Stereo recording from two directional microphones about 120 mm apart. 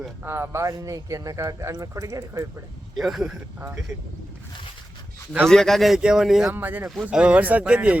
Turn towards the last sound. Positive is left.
turn(degrees=-10)  # may be behind; listen again after turning